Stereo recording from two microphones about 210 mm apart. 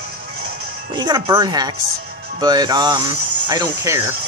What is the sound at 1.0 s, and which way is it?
Speech, 20° right (ahead or behind).